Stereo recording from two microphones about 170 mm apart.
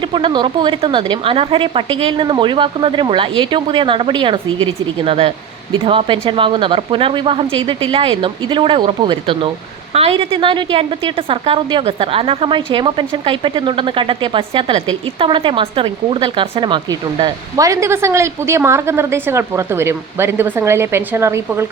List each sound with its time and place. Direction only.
0.1 s a woman's voice: 30° right (ahead or behind)